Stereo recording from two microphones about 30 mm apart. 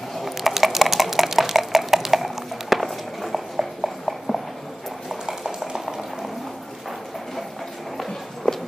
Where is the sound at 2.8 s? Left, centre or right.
Centre.